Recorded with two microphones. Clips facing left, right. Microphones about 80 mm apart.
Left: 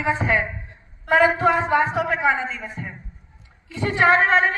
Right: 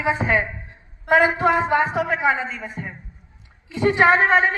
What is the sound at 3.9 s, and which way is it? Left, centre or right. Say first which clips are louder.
Speech: even; centre.